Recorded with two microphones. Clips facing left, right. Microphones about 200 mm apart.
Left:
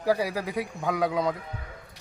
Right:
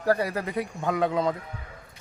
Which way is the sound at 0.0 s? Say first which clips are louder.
Right 1 dB; 5° left (ahead or behind).